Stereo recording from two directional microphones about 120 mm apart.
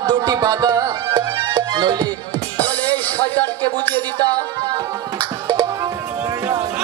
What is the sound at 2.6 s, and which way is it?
Music, 15° left (ahead or behind).